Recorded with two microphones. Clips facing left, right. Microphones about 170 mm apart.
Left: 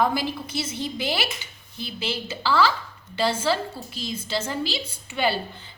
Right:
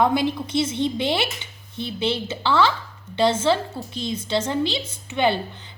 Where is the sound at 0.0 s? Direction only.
25° right (ahead or behind).